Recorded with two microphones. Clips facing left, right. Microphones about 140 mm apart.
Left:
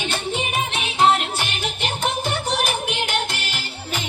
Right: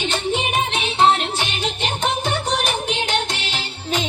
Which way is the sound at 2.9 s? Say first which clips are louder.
Right 2 dB; 10° left (ahead or behind).